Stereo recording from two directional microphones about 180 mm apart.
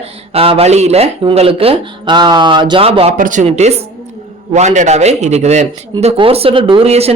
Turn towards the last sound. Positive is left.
turn(degrees=-35)  # may be behind; listen again after turning